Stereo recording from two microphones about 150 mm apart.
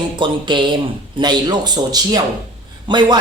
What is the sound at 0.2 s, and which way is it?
Speech, 30° right (ahead or behind).